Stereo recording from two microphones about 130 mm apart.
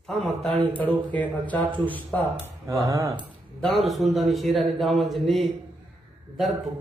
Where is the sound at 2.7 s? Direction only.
25° right (ahead or behind).